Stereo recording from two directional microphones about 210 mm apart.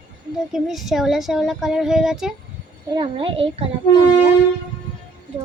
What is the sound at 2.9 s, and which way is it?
Speech, 25° right (ahead or behind).